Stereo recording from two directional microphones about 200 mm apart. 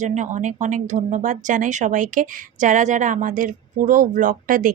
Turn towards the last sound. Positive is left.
turn(degrees=-45)  # may be behind; listen again after turning